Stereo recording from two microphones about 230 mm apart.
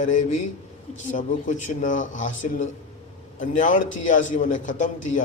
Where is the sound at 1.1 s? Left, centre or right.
Left.